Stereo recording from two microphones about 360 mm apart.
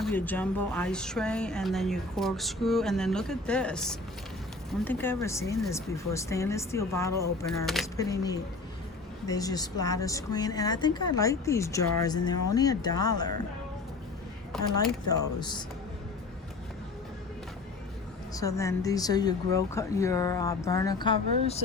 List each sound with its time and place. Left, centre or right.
0.0 s speech: centre
14.5 s speech: centre
15.4 s speech: centre
18.3 s speech: centre